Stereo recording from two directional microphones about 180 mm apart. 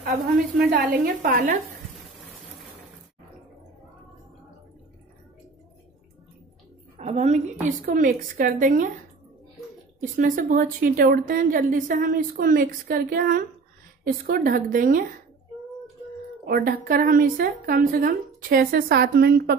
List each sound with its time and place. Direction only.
0.6 s a woman's voice: 55° right (ahead or behind)
7.0 s a sound: 40° right (ahead or behind)
7.6 s a woman's voice: 50° right (ahead or behind)
9.9 s a woman's voice: 50° right (ahead or behind)
16.4 s a woman's voice: 60° right (ahead or behind)